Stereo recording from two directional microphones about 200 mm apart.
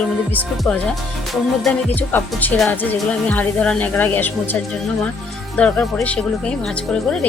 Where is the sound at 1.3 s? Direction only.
5° left (ahead or behind).